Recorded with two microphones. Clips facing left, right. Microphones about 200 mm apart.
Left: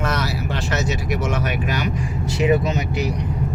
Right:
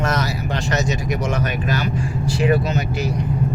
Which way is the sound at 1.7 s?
15° left (ahead or behind).